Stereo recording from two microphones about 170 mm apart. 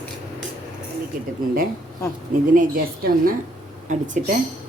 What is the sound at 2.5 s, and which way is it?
A woman's voice, 55° right (ahead or behind).